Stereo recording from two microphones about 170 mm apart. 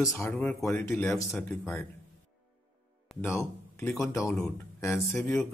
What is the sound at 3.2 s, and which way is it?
Speech, 15° left (ahead or behind).